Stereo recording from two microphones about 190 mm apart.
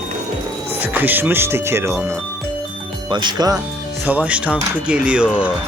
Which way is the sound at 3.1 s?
25° right (ahead or behind).